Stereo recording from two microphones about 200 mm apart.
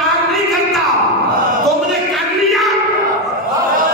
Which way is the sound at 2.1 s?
Centre (ahead or behind).